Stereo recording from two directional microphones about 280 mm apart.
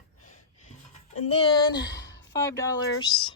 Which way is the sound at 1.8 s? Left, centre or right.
Left.